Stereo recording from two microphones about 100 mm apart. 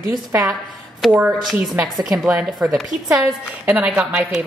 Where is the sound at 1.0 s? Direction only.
Centre (ahead or behind).